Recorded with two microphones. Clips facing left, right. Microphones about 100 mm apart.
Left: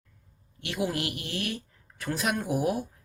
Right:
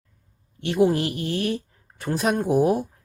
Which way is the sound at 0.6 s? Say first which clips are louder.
Right 10 dB; 35° right (ahead or behind).